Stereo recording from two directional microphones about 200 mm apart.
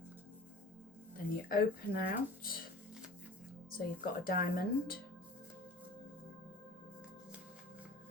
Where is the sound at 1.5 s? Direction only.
45° left (ahead or behind).